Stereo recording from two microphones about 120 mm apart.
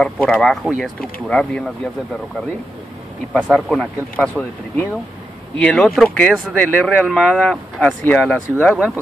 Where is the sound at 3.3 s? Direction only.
5° left (ahead or behind).